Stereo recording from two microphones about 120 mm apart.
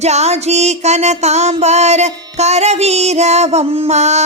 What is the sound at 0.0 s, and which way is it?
Music, 65° right (ahead or behind).